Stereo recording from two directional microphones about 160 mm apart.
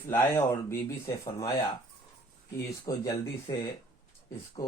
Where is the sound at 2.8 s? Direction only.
20° left (ahead or behind).